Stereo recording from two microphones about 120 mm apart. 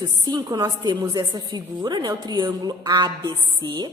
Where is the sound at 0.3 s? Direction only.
35° right (ahead or behind).